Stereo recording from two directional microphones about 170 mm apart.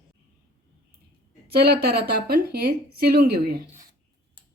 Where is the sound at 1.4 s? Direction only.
65° right (ahead or behind).